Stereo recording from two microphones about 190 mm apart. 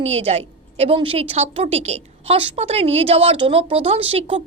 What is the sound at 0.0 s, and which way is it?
A woman's voice, 35° right (ahead or behind).